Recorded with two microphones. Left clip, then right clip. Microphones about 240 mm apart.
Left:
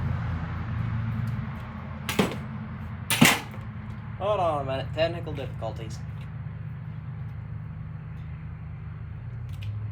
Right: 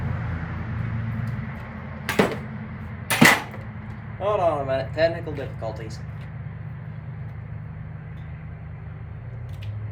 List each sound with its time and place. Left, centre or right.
0.1 s vehicle: centre
4.2 s speech: left
4.4 s speech: centre